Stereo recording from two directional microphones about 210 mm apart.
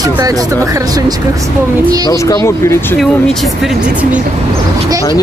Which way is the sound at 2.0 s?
15° left (ahead or behind).